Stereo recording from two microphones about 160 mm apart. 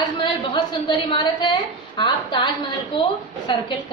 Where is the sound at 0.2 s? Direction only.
30° left (ahead or behind).